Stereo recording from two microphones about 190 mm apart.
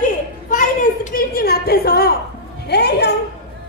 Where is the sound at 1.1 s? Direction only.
55° left (ahead or behind).